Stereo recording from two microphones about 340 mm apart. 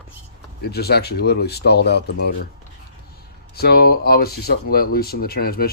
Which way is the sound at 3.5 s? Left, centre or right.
Left.